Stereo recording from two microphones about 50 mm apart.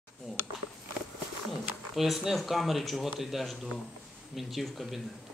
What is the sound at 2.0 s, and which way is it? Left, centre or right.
Speech, centre.